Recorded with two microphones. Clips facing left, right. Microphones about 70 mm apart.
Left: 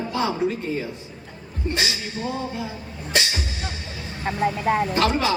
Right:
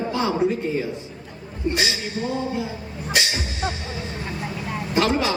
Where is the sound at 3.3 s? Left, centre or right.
Right.